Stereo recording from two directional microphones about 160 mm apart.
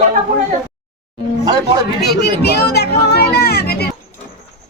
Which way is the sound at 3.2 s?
80° left.